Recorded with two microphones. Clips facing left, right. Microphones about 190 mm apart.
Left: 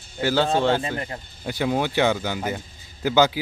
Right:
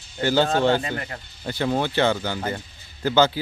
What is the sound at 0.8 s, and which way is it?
Speech, 30° left (ahead or behind).